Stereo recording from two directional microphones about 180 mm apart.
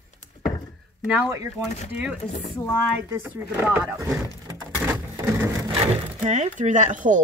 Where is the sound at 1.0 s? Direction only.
5° right (ahead or behind).